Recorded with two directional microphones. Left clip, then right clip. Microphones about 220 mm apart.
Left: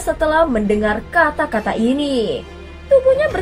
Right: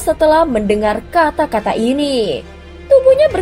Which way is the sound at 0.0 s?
30° right (ahead or behind).